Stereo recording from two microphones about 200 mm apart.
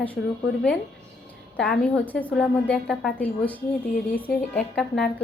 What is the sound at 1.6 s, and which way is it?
A woman's voice, 5° left (ahead or behind).